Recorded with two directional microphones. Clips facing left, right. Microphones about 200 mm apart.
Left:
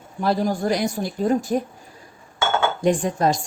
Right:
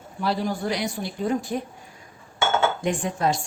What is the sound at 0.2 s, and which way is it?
A woman's voice, 45° left (ahead or behind).